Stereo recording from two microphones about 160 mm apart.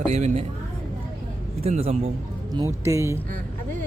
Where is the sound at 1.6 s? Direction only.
40° right (ahead or behind).